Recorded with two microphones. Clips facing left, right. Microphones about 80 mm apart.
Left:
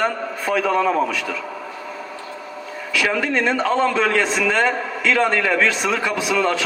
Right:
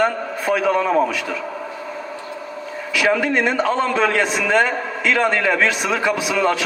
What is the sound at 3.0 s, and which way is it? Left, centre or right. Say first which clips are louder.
A man's voice: right 3 dB; centre.